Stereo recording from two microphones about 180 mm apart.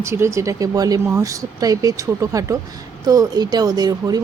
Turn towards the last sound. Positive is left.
turn(degrees=-20)  # may be behind; listen again after turning